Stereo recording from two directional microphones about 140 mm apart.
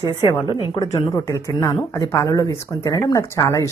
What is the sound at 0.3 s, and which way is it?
A woman's voice, 30° left (ahead or behind).